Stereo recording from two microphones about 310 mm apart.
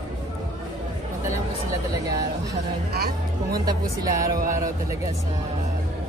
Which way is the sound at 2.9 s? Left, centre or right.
Right.